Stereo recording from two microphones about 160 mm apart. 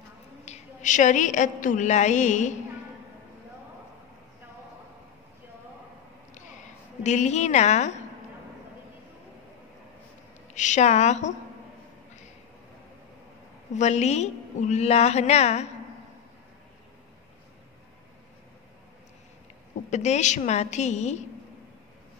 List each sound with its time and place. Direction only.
0.5 s a woman's voice: 50° left (ahead or behind)
7.0 s a woman's voice: 45° left (ahead or behind)
10.5 s a woman's voice: 50° left (ahead or behind)
13.7 s a woman's voice: 45° left (ahead or behind)
19.9 s a woman's voice: 45° left (ahead or behind)